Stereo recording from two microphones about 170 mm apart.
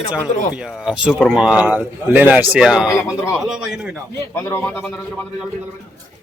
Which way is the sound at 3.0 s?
15° left (ahead or behind).